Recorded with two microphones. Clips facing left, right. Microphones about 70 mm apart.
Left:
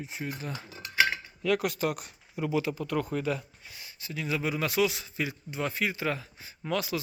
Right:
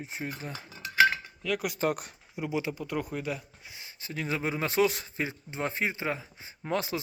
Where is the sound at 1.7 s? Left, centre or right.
Right.